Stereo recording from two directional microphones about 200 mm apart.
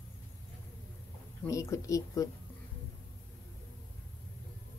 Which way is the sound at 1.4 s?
15° left (ahead or behind).